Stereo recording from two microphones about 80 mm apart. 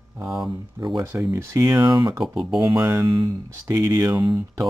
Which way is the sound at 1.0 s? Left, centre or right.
Right.